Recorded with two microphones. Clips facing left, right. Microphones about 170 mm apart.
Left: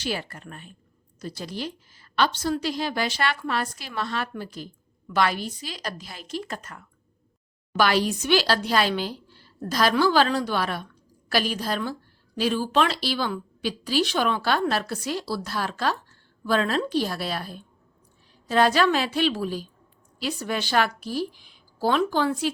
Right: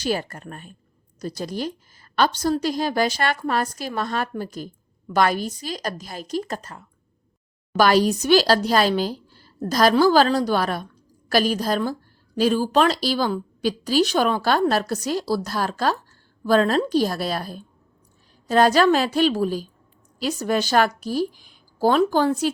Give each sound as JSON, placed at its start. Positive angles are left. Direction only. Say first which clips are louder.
{"t": 0.0, "sound": "a woman's voice", "louder": "right 5 dB", "side_deg": -45}